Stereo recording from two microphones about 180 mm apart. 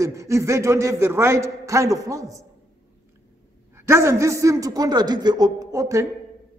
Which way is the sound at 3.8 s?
15° right (ahead or behind).